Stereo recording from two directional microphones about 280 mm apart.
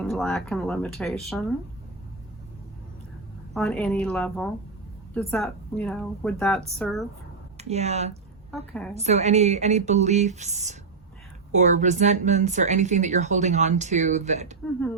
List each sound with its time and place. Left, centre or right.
0.0 s speech: centre
3.5 s speech: centre
7.6 s speech: right